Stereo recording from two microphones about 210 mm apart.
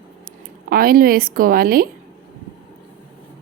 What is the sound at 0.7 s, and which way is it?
Speech, 45° right (ahead or behind).